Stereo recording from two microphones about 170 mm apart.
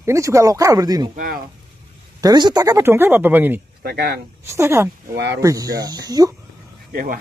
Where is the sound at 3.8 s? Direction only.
65° right (ahead or behind).